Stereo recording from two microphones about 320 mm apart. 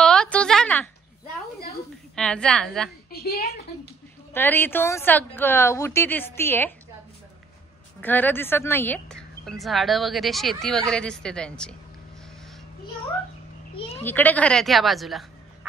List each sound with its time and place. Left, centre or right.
0.0 s a sound: centre
2.1 s a woman's voice: centre
3.3 s speech: left
4.3 s a woman's voice: centre
8.0 s a woman's voice: centre
13.7 s a sound: centre
14.0 s a woman's voice: centre